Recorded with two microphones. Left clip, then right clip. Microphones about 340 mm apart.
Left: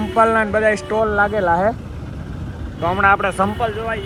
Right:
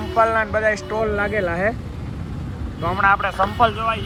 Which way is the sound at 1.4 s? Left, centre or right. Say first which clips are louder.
Left 5 dB; left.